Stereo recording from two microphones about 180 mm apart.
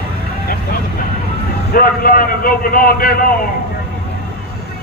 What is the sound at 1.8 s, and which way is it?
A man's voice, 50° left (ahead or behind).